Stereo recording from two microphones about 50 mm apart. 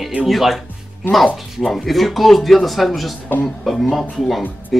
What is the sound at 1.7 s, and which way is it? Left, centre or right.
Speech, centre.